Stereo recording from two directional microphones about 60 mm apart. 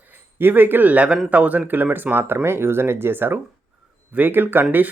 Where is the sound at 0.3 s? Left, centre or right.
Right.